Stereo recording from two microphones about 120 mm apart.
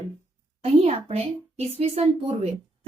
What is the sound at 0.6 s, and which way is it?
A woman's voice, 60° right (ahead or behind).